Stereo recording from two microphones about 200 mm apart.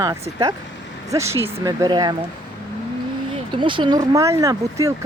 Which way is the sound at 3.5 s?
25° right (ahead or behind).